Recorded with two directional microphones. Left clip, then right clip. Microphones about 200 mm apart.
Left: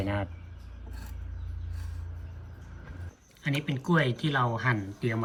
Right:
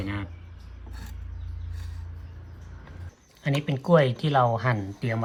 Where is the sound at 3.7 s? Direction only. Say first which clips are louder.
Right 8 dB; 25° right (ahead or behind).